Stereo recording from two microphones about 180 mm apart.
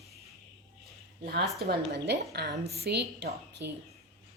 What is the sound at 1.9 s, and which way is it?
A woman's voice, 65° right (ahead or behind).